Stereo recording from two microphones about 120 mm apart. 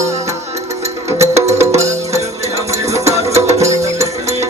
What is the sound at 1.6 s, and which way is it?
Music, 65° right (ahead or behind).